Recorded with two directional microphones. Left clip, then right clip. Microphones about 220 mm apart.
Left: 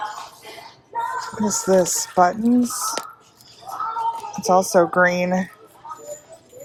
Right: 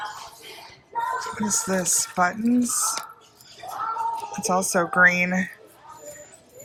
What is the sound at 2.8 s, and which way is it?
Speech, 5° left (ahead or behind).